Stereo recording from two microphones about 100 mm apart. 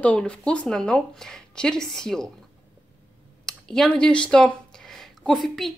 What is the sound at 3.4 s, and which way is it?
Speech, 5° left (ahead or behind).